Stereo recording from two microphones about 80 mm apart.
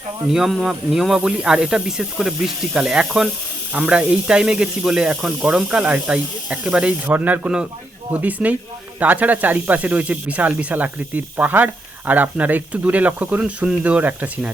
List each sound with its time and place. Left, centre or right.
0.3 s speech: centre; by 14.5 s right